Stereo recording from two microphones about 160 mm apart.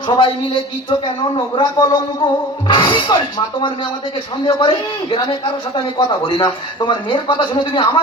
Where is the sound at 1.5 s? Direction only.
25° left (ahead or behind).